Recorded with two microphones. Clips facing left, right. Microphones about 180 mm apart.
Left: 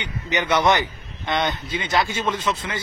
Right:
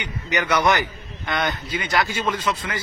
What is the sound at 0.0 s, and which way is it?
A man's voice, 25° left (ahead or behind).